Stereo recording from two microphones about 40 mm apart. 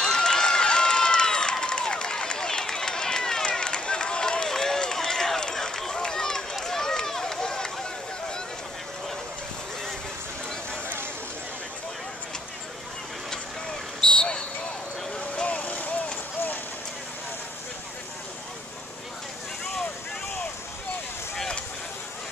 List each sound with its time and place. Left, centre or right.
0.0 s run: centre
13.3 s vehicle: left
15.4 s vehicle: left